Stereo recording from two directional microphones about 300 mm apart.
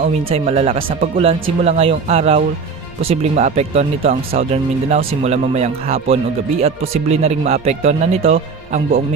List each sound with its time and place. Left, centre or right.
0.0 s speech: centre